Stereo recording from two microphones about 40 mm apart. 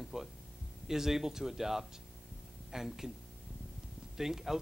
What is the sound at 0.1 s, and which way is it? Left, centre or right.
Speech, centre.